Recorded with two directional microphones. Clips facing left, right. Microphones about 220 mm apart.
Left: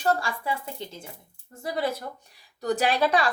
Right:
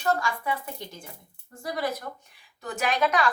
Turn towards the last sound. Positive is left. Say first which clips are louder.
# left 2 dB
turn(degrees=30)  # may be behind; listen again after turning